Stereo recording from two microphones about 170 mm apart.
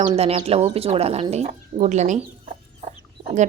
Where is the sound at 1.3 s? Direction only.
40° right (ahead or behind).